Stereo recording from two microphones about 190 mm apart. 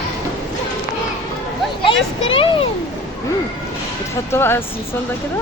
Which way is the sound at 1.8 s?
30° left (ahead or behind).